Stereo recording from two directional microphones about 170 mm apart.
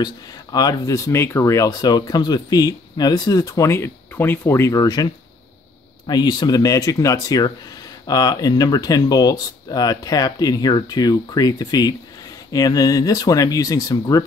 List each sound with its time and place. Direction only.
0.0 s speech: 25° left (ahead or behind)